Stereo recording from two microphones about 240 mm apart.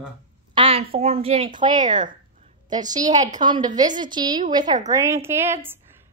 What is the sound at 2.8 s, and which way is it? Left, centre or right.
Speech, centre.